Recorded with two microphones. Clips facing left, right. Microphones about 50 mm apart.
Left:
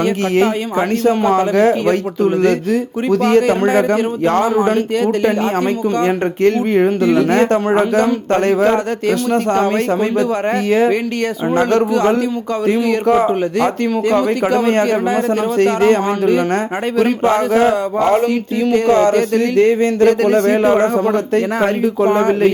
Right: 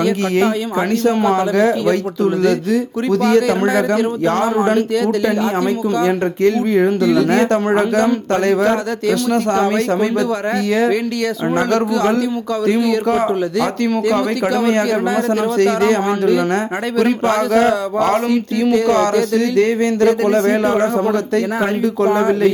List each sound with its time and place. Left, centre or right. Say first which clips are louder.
0.0 s speech: left 1 dB; left
4.5 s speech: left 1 dB; centre
6.0 s speech: even; left
9.9 s speech: left 1 dB; centre
18.3 s speech: even; left
20.1 s speech: left 1 dB; left